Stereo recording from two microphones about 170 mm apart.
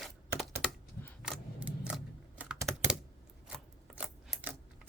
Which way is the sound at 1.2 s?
5° right (ahead or behind).